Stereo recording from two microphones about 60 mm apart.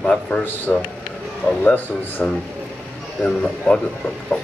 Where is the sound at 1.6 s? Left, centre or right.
Left.